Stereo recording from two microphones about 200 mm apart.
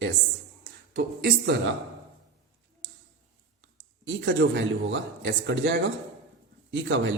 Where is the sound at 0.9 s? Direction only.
55° right (ahead or behind).